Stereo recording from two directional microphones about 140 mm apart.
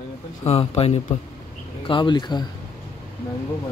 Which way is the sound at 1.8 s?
35° left (ahead or behind).